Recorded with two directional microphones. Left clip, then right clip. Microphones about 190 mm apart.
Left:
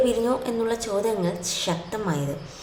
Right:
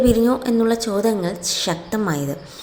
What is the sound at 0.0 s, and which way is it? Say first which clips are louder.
A woman's voice: right 5 dB; 30° right (ahead or behind).